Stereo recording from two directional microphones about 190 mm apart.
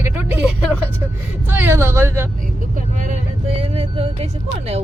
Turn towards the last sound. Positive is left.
turn(degrees=-30)  # may be behind; listen again after turning